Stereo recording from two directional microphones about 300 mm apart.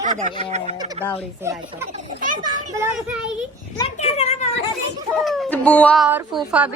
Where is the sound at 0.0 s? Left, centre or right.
Right.